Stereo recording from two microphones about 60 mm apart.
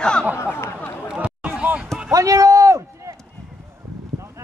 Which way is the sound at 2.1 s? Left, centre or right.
Right.